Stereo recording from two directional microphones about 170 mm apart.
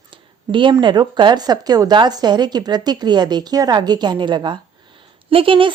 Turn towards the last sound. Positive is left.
turn(degrees=-30)  # may be behind; listen again after turning